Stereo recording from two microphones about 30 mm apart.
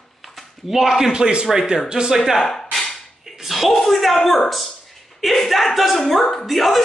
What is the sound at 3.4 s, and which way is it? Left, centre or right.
A woman's voice, centre.